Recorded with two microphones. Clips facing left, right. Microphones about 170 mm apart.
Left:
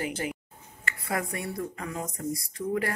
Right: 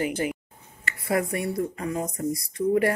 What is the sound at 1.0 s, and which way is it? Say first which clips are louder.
Speech: right 7 dB; 25° right (ahead or behind).